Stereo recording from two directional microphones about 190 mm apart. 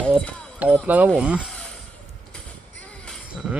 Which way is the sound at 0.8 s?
10° right (ahead or behind).